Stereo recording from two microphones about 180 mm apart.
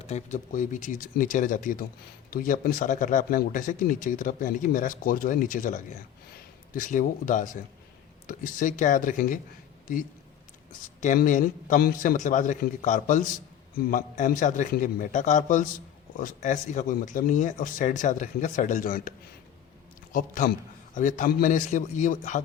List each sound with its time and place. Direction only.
0.0 s speech: 40° left (ahead or behind)
20.1 s speech: 50° left (ahead or behind)